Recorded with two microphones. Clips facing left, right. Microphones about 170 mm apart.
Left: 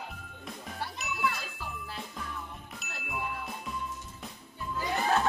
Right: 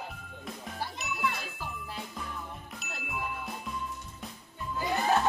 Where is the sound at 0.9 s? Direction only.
Centre (ahead or behind).